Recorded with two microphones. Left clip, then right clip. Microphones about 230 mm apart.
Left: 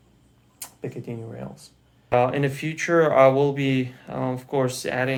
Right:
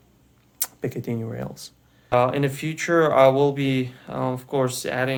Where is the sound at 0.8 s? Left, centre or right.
Right.